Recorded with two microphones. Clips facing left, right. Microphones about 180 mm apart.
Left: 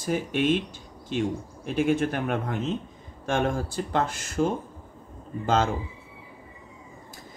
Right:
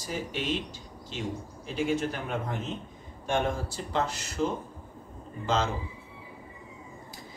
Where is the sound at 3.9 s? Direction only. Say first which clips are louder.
Left 3 dB; 50° left (ahead or behind).